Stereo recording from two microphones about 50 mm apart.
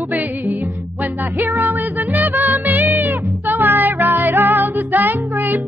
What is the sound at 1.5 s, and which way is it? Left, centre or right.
Music, right.